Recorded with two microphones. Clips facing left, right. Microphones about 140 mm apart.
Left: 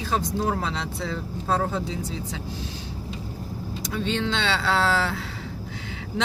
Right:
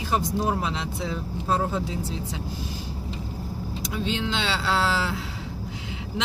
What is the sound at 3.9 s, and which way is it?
Speech, 5° right (ahead or behind).